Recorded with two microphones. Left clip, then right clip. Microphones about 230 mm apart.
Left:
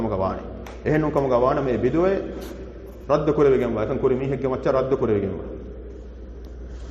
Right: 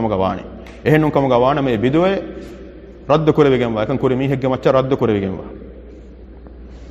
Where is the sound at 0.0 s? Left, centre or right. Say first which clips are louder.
Right 6 dB; right.